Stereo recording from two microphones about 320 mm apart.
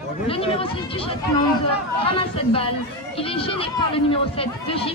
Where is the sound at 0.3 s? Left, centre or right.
Centre.